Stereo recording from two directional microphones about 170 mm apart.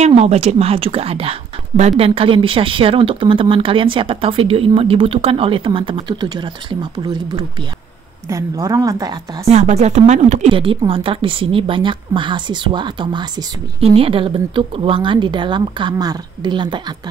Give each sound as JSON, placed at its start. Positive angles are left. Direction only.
{"t": 0.0, "sound": "a woman's voice", "side_deg": -40}
{"t": 9.5, "sound": "speech", "side_deg": -40}
{"t": 10.5, "sound": "speech", "side_deg": -30}